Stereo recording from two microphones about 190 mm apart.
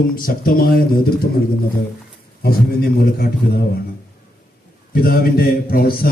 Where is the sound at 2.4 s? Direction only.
55° left (ahead or behind).